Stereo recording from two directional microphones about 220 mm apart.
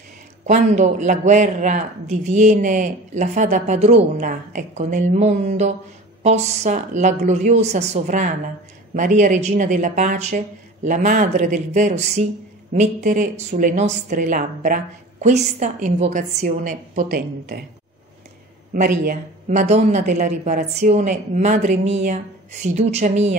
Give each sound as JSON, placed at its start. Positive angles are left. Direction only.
{"t": 0.5, "sound": "a man's voice", "side_deg": -35}
{"t": 18.7, "sound": "a man's voice", "side_deg": -40}